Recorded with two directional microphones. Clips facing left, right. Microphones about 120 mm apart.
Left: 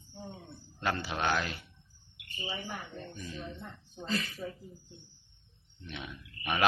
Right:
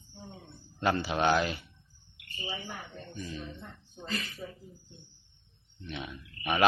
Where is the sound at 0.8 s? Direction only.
15° right (ahead or behind).